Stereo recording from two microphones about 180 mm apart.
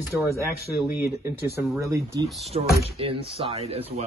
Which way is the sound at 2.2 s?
Centre (ahead or behind).